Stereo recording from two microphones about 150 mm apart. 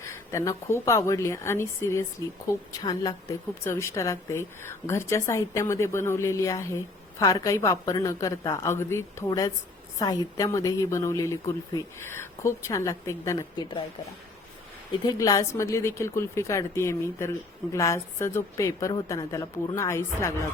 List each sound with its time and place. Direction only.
0.0 s a woman's voice: 20° left (ahead or behind)
15.0 s a woman's voice: 20° left (ahead or behind)